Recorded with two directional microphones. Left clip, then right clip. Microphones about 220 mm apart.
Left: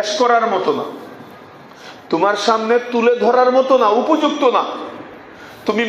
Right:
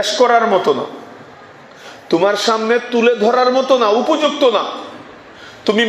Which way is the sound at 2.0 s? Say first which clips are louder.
Right 1 dB; 35° right (ahead or behind).